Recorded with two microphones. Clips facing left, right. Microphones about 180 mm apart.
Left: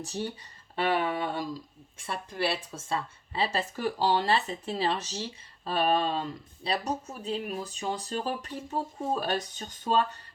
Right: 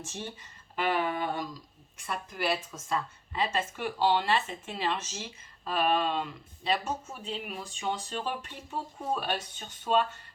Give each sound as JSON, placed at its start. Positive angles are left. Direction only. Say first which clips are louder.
{"t": 0.0, "sound": "speech", "louder": "left 6 dB", "side_deg": 35}
{"t": 0.8, "sound": "a sound", "louder": "left 2 dB", "side_deg": 25}
{"t": 2.0, "sound": "speech", "louder": "left 1 dB", "side_deg": 30}